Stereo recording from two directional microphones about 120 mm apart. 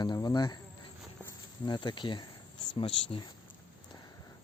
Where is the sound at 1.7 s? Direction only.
40° left (ahead or behind).